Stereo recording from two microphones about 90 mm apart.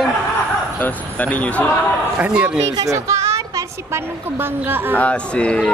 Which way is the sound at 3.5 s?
25° right (ahead or behind).